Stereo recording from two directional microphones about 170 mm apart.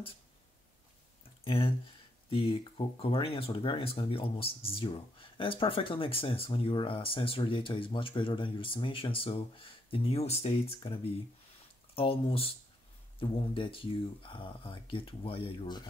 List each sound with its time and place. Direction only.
1.4 s speech: 30° left (ahead or behind)